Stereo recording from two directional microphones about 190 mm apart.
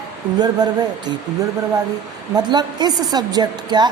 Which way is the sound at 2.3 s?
20° right (ahead or behind).